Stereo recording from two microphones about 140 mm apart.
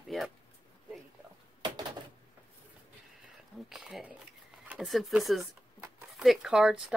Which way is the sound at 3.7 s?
5° right (ahead or behind).